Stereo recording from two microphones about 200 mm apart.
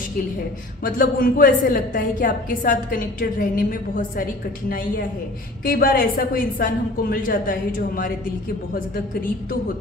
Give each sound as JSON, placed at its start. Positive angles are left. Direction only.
{"t": 0.8, "sound": "a woman's voice", "side_deg": 45}